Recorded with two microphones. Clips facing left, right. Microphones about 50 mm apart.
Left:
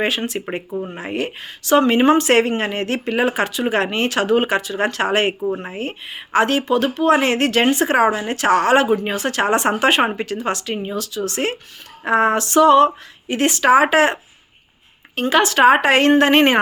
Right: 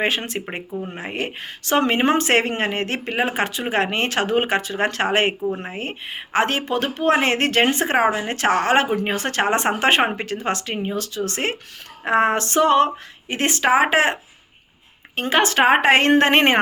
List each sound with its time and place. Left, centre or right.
0.0 s speech: right
13.7 s speech: right